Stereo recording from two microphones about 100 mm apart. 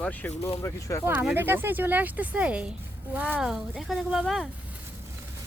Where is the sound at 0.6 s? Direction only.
30° left (ahead or behind).